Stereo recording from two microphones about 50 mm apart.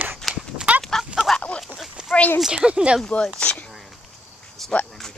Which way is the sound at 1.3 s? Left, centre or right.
Centre.